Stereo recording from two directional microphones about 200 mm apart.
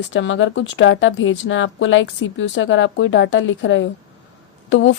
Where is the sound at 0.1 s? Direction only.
70° left (ahead or behind).